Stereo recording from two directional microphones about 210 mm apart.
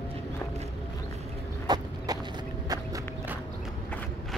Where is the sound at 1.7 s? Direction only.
20° right (ahead or behind).